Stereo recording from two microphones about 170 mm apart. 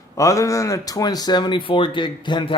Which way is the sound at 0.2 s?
20° left (ahead or behind).